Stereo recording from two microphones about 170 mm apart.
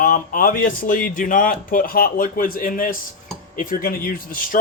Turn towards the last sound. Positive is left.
turn(degrees=55)  # may be behind; listen again after turning